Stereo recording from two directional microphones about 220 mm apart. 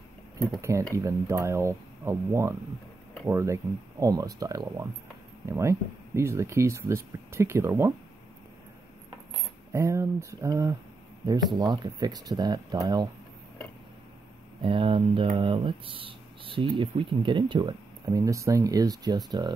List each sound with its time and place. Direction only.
0.6 s speech: 15° right (ahead or behind)
9.7 s speech: 10° right (ahead or behind)
14.6 s speech: 25° right (ahead or behind)